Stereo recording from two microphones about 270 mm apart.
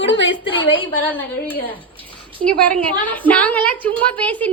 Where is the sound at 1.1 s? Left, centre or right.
Centre.